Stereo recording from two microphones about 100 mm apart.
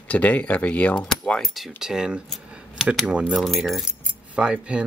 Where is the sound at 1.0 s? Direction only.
5° left (ahead or behind).